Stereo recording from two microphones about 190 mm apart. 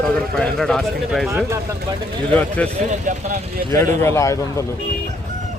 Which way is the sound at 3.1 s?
40° right (ahead or behind).